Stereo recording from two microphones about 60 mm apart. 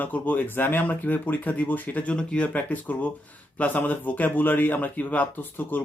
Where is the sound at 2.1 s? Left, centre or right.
Centre.